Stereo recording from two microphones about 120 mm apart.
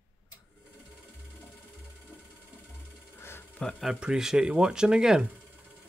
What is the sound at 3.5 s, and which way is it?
Speech, 5° left (ahead or behind).